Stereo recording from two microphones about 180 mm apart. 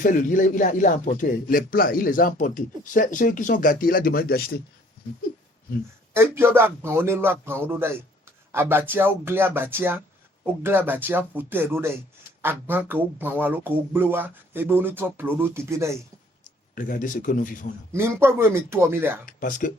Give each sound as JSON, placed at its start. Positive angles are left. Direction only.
{"t": 0.0, "sound": "speech", "side_deg": 45}
{"t": 6.1, "sound": "speech", "side_deg": -15}
{"t": 16.7, "sound": "speech", "side_deg": 50}
{"t": 17.9, "sound": "speech", "side_deg": -15}
{"t": 19.2, "sound": "speech", "side_deg": 50}